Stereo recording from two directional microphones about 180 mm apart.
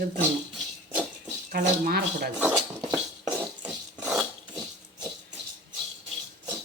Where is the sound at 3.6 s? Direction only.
5° right (ahead or behind).